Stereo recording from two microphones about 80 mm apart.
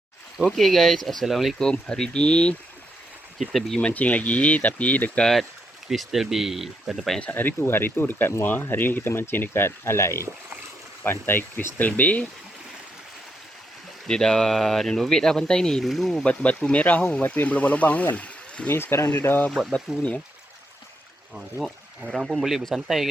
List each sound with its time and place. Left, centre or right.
0.4 s speech: centre
3.8 s speech: centre
5.2 s speech: centre
7.2 s speech: left
14.1 s speech: centre
16.2 s speech: centre
18.7 s speech: left
19.5 s speech: centre
21.3 s speech: centre